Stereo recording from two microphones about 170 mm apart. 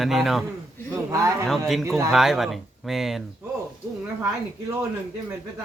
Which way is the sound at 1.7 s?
Centre (ahead or behind).